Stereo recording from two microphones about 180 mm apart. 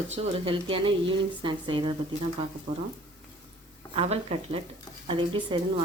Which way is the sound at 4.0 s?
35° right (ahead or behind).